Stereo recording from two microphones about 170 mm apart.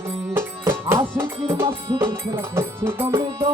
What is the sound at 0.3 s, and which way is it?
Music, 15° right (ahead or behind).